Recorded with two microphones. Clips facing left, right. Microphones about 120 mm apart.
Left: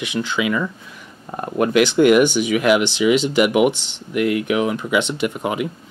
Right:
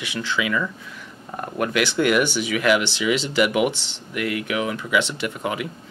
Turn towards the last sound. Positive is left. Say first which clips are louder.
# left 5 dB
turn(degrees=20)  # may be behind; listen again after turning